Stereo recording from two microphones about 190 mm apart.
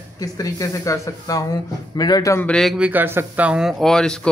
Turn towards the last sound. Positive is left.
turn(degrees=5)  # may be behind; listen again after turning